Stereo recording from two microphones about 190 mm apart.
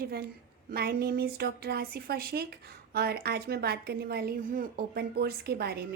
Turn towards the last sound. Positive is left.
turn(degrees=-55)  # may be behind; listen again after turning